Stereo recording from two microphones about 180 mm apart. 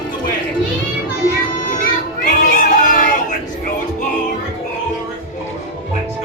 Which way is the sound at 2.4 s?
45° left (ahead or behind).